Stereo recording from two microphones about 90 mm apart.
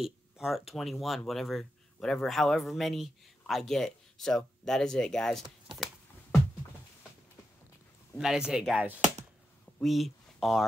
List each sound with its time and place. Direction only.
0.0 s speech: 5° right (ahead or behind)
8.2 s speech: 5° right (ahead or behind)
8.7 s speech: 20° right (ahead or behind)
9.8 s a sound: centre (ahead or behind)